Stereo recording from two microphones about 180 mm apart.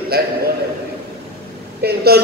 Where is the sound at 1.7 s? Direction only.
60° right (ahead or behind).